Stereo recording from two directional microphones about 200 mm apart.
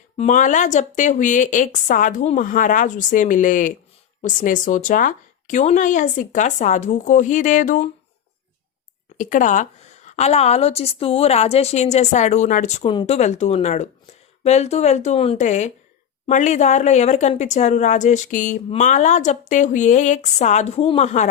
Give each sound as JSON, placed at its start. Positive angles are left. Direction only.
{"t": 0.2, "sound": "speech", "side_deg": 35}
{"t": 9.1, "sound": "speech", "side_deg": 40}